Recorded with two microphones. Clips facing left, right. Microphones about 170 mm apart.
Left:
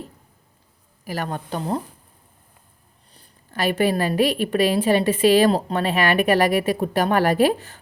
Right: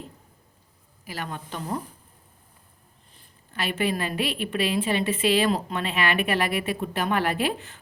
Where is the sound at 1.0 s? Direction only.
45° left (ahead or behind).